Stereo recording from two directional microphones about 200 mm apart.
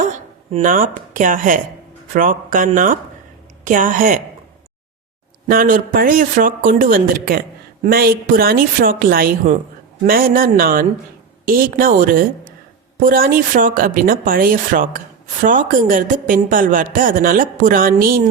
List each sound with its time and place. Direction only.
0.0 s a woman's voice: 40° right (ahead or behind)
5.5 s a woman's voice: 45° right (ahead or behind)